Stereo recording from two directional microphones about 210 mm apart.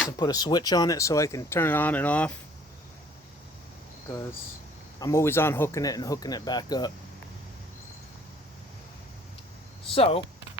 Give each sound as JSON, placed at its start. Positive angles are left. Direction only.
{"t": 0.2, "sound": "speech", "side_deg": 20}
{"t": 4.9, "sound": "speech", "side_deg": 15}
{"t": 9.9, "sound": "speech", "side_deg": 25}